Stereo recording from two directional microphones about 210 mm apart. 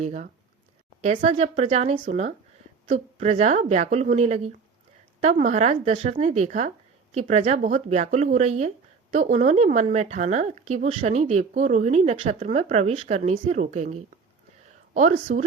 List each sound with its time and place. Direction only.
0.0 s speech: 35° right (ahead or behind)